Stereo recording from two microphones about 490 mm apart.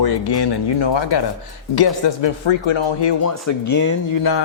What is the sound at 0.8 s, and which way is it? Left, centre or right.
Speech, left.